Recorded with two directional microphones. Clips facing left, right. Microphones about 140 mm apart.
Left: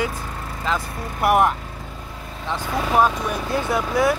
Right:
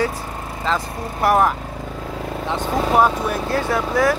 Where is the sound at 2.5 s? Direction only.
25° right (ahead or behind).